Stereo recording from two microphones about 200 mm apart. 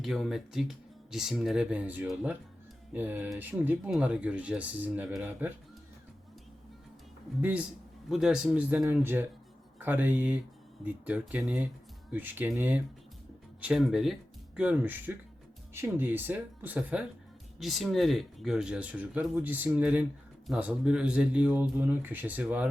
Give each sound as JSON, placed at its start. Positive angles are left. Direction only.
{"t": 0.0, "sound": "speech", "side_deg": 0}
{"t": 7.4, "sound": "speech", "side_deg": -5}